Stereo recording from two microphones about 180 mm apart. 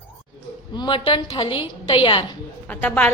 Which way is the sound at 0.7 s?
25° left (ahead or behind).